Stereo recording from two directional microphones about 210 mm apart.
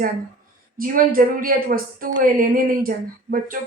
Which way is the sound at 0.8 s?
40° right (ahead or behind).